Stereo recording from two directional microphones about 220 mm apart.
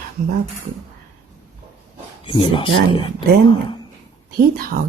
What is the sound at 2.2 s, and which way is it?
Speech, 25° left (ahead or behind).